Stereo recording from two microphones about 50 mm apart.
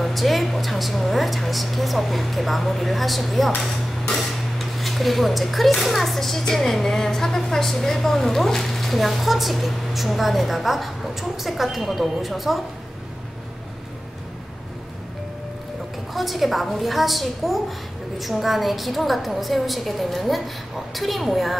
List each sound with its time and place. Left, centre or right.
0.0 s speech: centre
16.1 s speech: centre